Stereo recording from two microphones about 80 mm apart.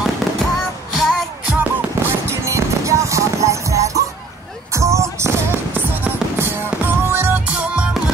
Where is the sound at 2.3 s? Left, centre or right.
Right.